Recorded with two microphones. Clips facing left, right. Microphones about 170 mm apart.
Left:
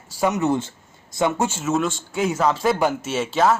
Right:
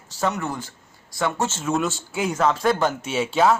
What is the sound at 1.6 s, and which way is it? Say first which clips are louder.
Speech: left 2 dB; centre (ahead or behind).